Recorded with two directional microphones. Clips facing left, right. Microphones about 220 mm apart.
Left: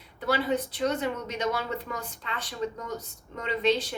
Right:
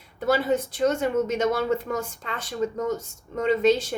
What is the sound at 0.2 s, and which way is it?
A woman's voice, 45° right (ahead or behind).